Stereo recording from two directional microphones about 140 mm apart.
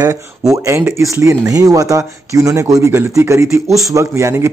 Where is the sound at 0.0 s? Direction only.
20° right (ahead or behind).